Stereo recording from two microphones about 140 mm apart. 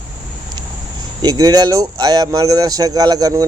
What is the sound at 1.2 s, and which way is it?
Speech, 25° right (ahead or behind).